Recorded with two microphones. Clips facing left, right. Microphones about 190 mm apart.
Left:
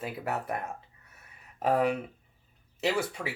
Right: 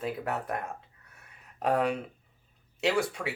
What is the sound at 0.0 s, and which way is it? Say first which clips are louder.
Speech: right 1 dB; 5° left (ahead or behind).